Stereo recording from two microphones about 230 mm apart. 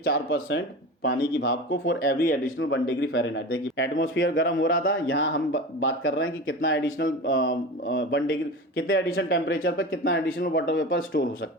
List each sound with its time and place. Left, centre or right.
0.0 s speech: left
1.0 s speech: left
2.6 s speech: left
9.7 s speech: left